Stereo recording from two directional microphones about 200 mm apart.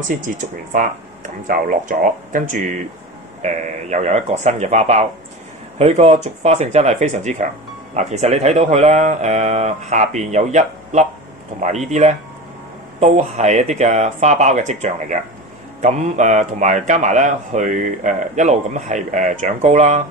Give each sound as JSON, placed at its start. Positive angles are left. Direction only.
{"t": 0.1, "sound": "a man's voice", "side_deg": -40}